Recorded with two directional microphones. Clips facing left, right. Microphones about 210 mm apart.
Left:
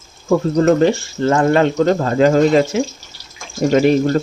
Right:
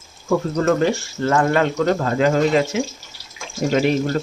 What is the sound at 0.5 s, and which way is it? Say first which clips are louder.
Speech: left 6 dB; 25° left (ahead or behind).